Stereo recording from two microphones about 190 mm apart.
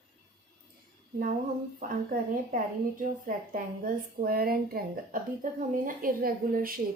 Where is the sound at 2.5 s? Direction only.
45° right (ahead or behind).